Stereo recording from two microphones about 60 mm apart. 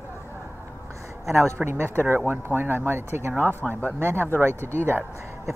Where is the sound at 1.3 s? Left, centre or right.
Right.